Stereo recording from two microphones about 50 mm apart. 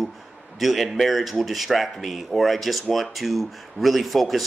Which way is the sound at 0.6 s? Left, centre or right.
Centre.